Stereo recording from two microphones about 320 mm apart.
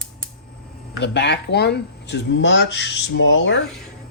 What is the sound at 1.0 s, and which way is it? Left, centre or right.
Speech, left.